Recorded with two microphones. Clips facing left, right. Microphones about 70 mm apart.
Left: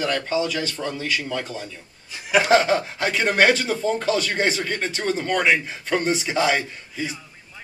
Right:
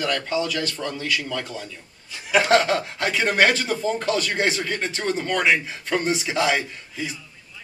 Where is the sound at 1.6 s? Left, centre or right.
Centre.